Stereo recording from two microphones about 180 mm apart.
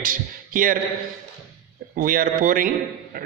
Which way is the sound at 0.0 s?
50° right (ahead or behind).